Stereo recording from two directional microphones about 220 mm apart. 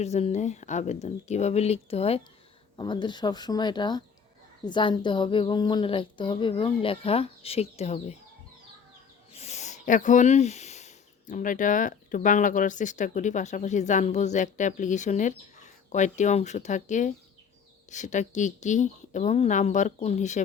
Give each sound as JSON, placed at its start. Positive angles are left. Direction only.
{"t": 0.0, "sound": "speech", "side_deg": 30}
{"t": 9.3, "sound": "speech", "side_deg": 30}